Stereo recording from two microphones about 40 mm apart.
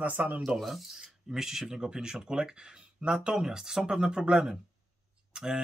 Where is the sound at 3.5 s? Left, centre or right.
Centre.